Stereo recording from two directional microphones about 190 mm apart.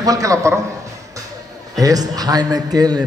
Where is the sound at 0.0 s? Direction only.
20° right (ahead or behind).